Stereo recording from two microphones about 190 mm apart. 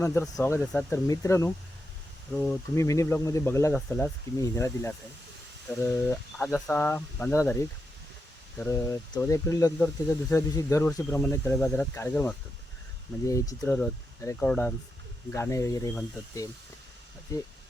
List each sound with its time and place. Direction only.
0.0 s speech: 10° left (ahead or behind)
2.3 s speech: 5° left (ahead or behind)
2.7 s speech: 15° left (ahead or behind)